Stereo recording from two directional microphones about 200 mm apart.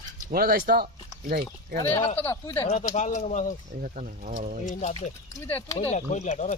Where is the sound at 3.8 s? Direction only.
40° right (ahead or behind).